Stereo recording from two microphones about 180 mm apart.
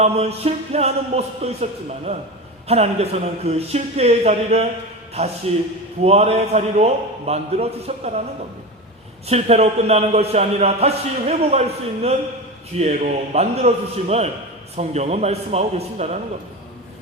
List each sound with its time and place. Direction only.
0.0 s a man's voice: 35° right (ahead or behind)
9.2 s a man's voice: 35° right (ahead or behind)
12.7 s a man's voice: 35° right (ahead or behind)